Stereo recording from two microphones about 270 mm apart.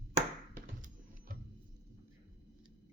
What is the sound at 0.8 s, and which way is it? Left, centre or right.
Music, right.